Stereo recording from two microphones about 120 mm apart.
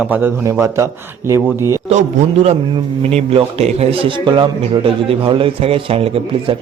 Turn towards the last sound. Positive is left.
turn(degrees=-55)  # may be behind; listen again after turning